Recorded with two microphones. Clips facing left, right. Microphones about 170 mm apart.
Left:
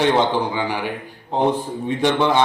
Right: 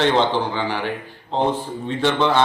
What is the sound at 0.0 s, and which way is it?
A man's voice, 10° left (ahead or behind).